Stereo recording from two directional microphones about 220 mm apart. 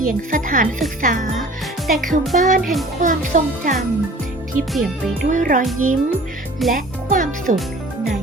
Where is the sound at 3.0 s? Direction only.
35° right (ahead or behind).